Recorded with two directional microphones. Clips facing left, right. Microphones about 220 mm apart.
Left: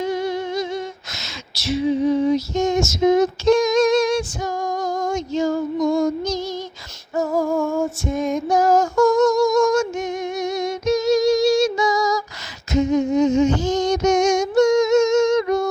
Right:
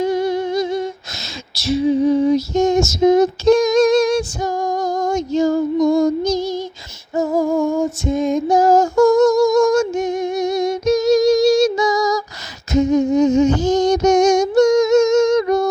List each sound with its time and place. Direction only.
0.0 s a sound: 35° right (ahead or behind)
6.4 s female singing: 10° right (ahead or behind)
7.2 s female singing: 20° right (ahead or behind)
9.3 s music: 35° right (ahead or behind)
12.7 s female singing: 40° right (ahead or behind)